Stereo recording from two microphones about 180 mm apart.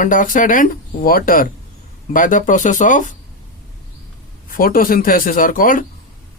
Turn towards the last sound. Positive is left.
turn(degrees=50)  # may be behind; listen again after turning